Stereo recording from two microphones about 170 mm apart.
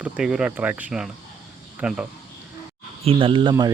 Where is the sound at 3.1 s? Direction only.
30° right (ahead or behind).